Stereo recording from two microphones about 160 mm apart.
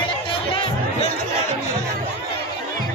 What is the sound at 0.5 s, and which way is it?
Music, 35° left (ahead or behind).